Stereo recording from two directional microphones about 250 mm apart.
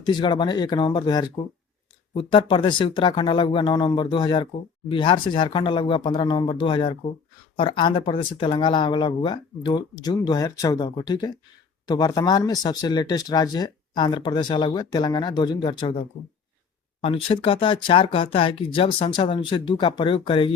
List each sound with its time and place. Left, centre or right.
0.0 s speech: centre